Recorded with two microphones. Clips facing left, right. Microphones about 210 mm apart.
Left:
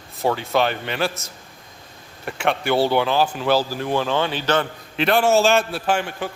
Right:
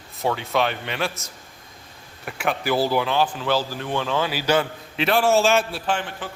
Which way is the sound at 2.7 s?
30° left (ahead or behind).